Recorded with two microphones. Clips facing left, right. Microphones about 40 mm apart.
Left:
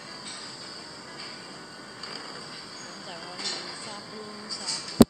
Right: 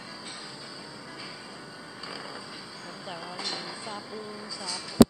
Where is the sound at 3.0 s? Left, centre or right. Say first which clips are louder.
Right 1 dB; centre.